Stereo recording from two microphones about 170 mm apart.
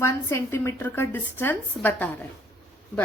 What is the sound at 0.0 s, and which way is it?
A woman's voice, 15° left (ahead or behind).